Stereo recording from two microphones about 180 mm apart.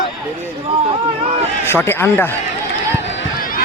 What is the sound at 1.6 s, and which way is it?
Speech, 10° left (ahead or behind).